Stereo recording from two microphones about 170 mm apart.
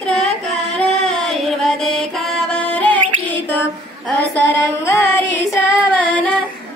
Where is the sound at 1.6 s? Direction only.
Centre (ahead or behind).